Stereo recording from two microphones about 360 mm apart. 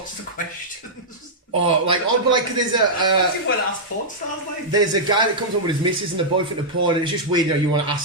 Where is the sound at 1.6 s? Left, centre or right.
Centre.